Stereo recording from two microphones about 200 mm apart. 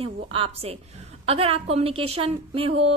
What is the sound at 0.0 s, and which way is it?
A woman's voice, 30° right (ahead or behind).